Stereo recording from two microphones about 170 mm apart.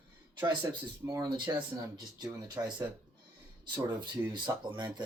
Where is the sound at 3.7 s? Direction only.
25° right (ahead or behind).